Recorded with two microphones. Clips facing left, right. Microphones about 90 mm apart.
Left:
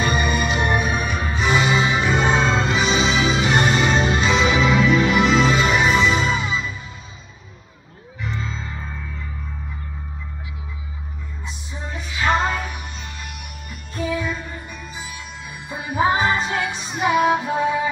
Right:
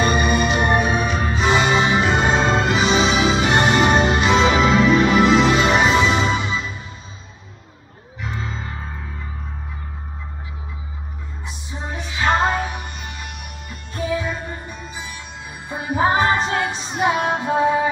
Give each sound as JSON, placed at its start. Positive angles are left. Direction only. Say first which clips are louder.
{"t": 0.0, "sound": "music", "louder": "right 3 dB", "side_deg": -20}
{"t": 2.6, "sound": "music", "louder": "right 2 dB", "side_deg": -20}
{"t": 3.9, "sound": "music", "louder": "right 3 dB", "side_deg": -55}
{"t": 4.2, "sound": "music", "louder": "right 2 dB", "side_deg": -25}
{"t": 11.4, "sound": "music", "louder": "right 2 dB", "side_deg": -20}
{"t": 13.9, "sound": "music", "louder": "right 1 dB", "side_deg": -30}